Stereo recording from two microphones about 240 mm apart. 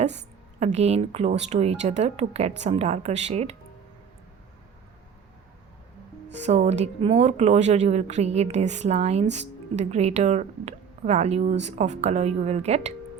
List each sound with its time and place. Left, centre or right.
0.6 s speech: right
6.4 s speech: right